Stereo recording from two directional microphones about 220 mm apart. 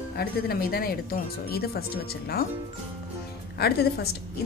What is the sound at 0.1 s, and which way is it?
A woman's voice, 45° left (ahead or behind).